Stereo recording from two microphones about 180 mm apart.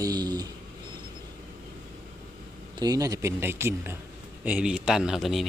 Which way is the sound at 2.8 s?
20° right (ahead or behind).